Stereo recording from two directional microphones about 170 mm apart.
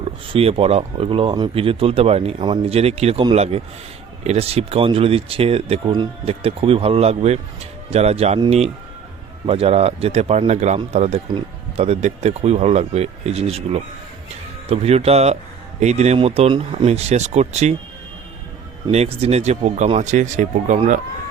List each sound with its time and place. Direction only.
0.3 s speech: 35° right (ahead or behind)
18.9 s speech: 35° right (ahead or behind)